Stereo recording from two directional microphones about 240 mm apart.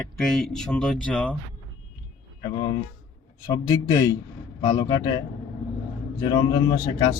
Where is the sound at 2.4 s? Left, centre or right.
Centre.